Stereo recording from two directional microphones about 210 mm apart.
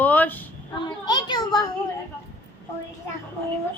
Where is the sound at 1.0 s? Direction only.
20° left (ahead or behind).